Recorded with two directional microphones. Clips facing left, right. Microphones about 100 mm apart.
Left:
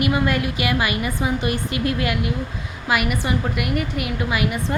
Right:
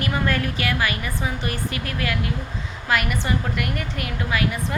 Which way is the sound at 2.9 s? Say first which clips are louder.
Left 2 dB; 10° left (ahead or behind).